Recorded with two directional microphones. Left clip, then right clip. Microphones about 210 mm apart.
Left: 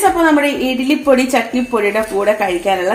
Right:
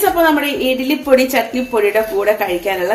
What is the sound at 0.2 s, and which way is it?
A woman's voice, 35° left (ahead or behind).